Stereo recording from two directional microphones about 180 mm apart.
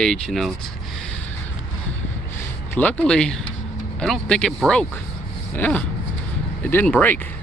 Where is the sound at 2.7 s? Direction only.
10° left (ahead or behind).